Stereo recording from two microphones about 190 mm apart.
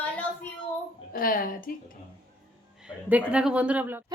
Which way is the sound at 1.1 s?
50° left (ahead or behind).